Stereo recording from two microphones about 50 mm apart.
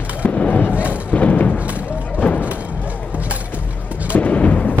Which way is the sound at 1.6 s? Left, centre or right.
Right.